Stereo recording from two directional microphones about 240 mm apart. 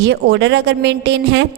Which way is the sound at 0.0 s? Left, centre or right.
Right.